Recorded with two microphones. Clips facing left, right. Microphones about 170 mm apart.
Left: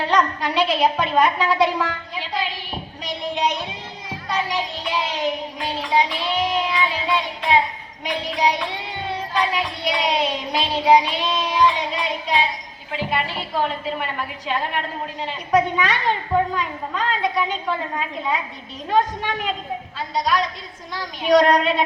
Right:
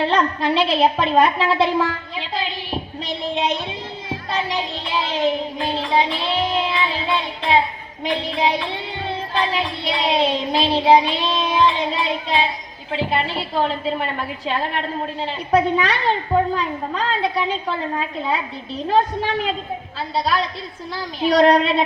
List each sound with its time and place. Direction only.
0.0 s a woman's voice: 30° right (ahead or behind)
8.0 s child singing: 30° right (ahead or behind)
12.9 s a woman's voice: 30° right (ahead or behind)